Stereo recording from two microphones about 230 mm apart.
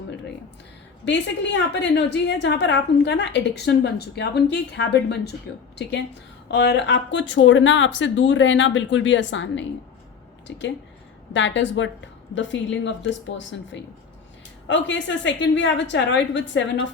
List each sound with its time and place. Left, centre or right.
1.0 s a woman's voice: left